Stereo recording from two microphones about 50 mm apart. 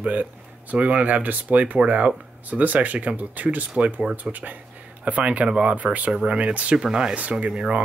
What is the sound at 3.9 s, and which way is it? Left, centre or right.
Speech, centre.